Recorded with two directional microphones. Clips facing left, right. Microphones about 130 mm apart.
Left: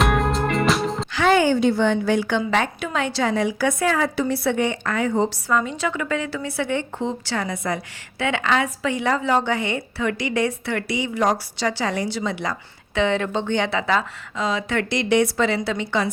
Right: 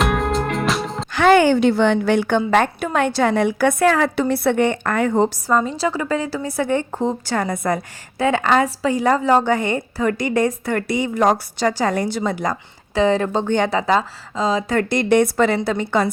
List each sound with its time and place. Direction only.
0.0 s music: centre (ahead or behind)
1.1 s a woman's voice: 60° right (ahead or behind)
5.5 s a woman's voice: 35° right (ahead or behind)